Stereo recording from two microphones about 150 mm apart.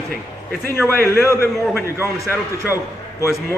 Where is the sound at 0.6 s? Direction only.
15° left (ahead or behind).